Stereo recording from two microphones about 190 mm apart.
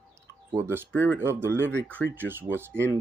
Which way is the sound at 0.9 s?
10° left (ahead or behind).